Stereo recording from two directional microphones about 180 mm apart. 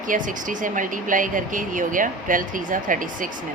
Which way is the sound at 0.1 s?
45° right (ahead or behind).